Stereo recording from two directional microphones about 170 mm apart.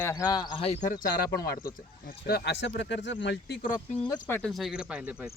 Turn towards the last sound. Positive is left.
turn(degrees=-5)  # may be behind; listen again after turning